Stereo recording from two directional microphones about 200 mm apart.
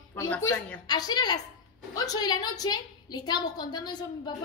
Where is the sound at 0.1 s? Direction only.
15° left (ahead or behind).